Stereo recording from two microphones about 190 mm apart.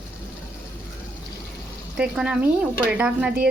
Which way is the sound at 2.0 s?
5° right (ahead or behind).